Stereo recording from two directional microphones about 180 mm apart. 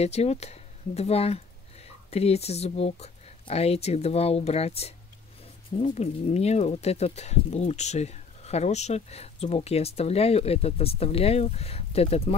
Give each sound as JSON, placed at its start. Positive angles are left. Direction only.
{"t": 0.0, "sound": "speech", "side_deg": 35}